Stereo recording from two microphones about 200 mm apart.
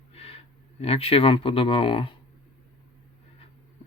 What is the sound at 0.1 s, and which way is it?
Speech, 30° left (ahead or behind).